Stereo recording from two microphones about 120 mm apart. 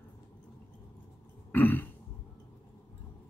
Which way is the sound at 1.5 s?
15° left (ahead or behind).